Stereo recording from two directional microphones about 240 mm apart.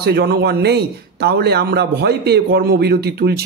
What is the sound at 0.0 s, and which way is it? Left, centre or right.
A man's voice, right.